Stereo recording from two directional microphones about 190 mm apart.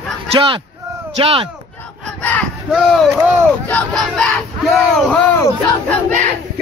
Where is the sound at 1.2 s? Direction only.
30° right (ahead or behind).